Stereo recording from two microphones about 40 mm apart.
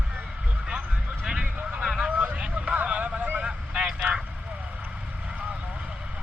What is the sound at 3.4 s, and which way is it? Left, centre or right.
Vehicle, right.